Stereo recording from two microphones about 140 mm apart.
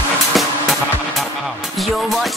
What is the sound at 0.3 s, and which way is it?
Music, centre (ahead or behind).